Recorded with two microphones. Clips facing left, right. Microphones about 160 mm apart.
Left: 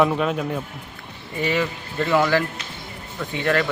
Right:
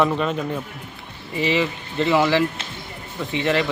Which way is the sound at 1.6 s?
15° right (ahead or behind).